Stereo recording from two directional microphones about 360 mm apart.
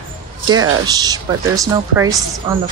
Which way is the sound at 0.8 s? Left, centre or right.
Centre.